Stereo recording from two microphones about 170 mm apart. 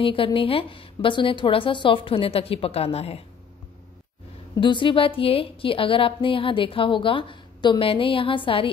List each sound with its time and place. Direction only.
0.0 s a woman's voice: 30° left (ahead or behind)
4.6 s a woman's voice: 30° left (ahead or behind)